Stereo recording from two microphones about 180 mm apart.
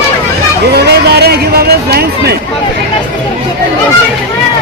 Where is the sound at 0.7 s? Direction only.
65° right (ahead or behind).